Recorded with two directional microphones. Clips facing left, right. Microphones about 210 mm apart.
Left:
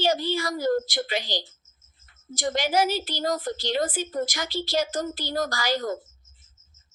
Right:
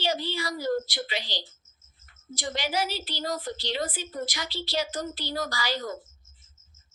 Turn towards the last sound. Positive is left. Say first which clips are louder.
# left 5 dB
turn(degrees=45)  # may be behind; listen again after turning